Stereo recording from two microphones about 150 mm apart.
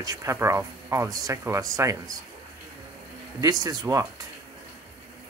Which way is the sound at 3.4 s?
25° right (ahead or behind).